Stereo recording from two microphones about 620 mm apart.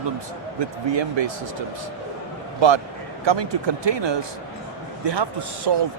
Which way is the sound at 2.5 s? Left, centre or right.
Right.